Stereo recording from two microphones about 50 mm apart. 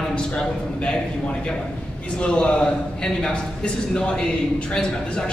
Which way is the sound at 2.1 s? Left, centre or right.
Left.